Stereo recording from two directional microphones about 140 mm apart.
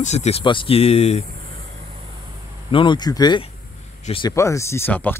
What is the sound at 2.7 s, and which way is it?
Speech, 35° left (ahead or behind).